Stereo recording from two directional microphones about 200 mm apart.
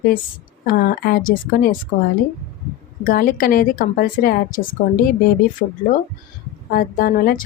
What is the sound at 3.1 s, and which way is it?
A woman's voice, 50° left (ahead or behind).